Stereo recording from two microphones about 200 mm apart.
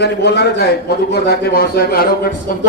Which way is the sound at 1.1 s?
50° left (ahead or behind).